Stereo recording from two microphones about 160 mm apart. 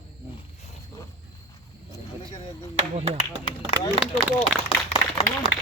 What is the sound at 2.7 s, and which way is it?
Speech, 40° right (ahead or behind).